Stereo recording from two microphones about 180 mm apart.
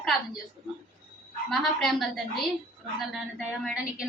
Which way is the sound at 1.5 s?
Centre (ahead or behind).